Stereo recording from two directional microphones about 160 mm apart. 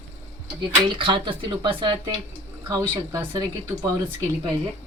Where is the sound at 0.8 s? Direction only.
30° right (ahead or behind).